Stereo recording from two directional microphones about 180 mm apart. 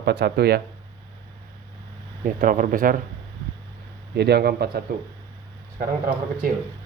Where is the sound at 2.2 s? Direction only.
50° right (ahead or behind).